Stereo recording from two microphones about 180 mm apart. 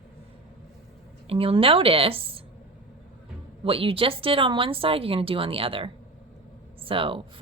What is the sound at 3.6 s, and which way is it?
A woman's voice, 30° right (ahead or behind).